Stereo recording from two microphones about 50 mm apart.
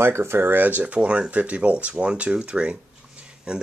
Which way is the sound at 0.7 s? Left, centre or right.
Right.